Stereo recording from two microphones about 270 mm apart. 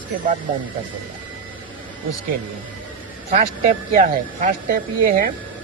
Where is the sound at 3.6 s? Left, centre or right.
Right.